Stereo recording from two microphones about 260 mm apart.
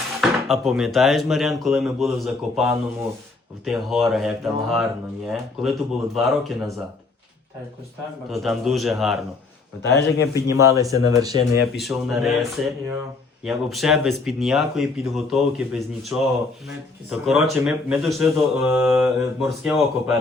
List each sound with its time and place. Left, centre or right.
0.2 s speech: centre
8.3 s speech: centre
9.8 s a man's voice: left
10.3 s speech: centre
11.6 s speech: centre